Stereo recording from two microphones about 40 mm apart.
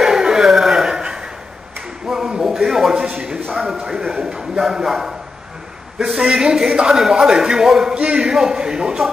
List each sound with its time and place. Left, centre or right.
0.0 s a sound: centre
3.1 s a man's voice: right
3.5 s speech: centre
4.2 s a man's voice: centre